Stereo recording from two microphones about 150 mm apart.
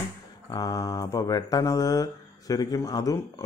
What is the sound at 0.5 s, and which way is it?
Speech, 25° left (ahead or behind).